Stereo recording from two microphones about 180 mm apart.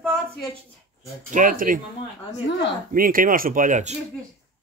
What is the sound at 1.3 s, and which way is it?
Speech, 50° right (ahead or behind).